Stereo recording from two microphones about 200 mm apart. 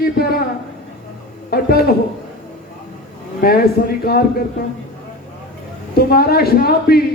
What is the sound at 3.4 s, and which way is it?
Speech, 50° left (ahead or behind).